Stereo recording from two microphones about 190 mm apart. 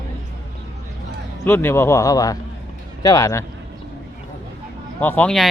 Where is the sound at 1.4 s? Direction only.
15° left (ahead or behind).